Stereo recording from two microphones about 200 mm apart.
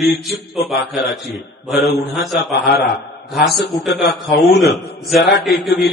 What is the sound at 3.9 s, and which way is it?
A man's voice, centre (ahead or behind).